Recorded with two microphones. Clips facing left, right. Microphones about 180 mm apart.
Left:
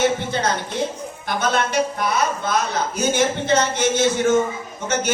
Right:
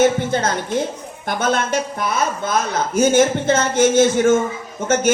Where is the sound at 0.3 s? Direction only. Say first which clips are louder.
Right 3 dB; 50° right (ahead or behind).